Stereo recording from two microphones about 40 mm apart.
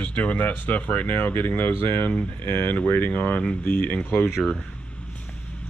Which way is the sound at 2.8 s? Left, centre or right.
Left.